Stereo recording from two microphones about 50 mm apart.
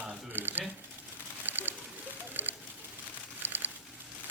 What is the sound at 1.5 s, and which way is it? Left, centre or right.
Ratchet, right.